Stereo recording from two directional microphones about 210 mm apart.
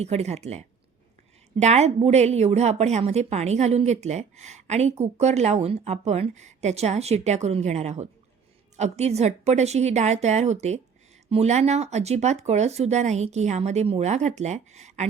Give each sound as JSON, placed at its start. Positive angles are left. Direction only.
{"t": 0.0, "sound": "speech", "side_deg": -30}